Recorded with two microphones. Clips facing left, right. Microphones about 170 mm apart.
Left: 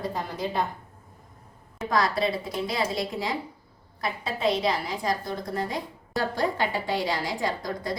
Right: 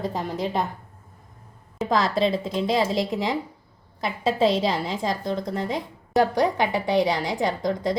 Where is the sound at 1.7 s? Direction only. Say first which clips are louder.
Right 3 dB; 25° right (ahead or behind).